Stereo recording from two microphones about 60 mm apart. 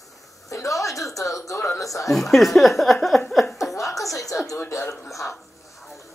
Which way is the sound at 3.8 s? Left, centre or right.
Left.